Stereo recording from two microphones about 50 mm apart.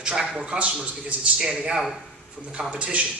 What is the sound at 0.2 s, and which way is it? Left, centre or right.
A man's voice, centre.